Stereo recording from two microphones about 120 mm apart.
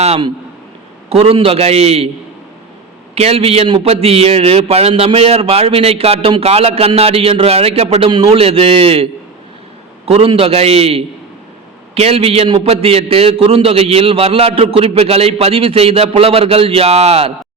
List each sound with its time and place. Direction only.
1.1 s a man's voice: 50° right (ahead or behind)
3.2 s a man's voice: 55° right (ahead or behind)
8.1 s a man's voice: 45° right (ahead or behind)
10.1 s a man's voice: 50° right (ahead or behind)